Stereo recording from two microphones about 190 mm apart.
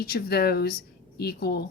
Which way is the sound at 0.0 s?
55° left (ahead or behind).